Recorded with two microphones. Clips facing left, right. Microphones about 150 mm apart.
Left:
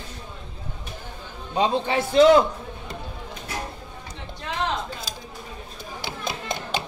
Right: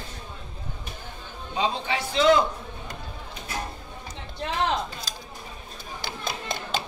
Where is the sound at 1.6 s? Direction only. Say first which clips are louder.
Left 5 dB; 50° left (ahead or behind).